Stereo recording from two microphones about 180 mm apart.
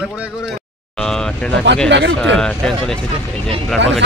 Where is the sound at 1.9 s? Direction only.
80° right.